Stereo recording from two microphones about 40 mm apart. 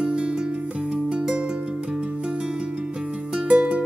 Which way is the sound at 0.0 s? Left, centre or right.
Right.